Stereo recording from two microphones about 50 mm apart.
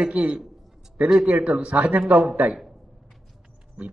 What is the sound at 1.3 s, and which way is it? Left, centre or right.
Speech, right.